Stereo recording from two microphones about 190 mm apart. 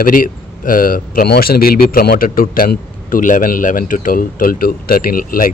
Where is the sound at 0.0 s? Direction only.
45° left (ahead or behind).